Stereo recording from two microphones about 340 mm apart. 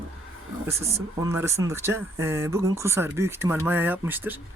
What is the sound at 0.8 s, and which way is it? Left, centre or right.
Speech, centre.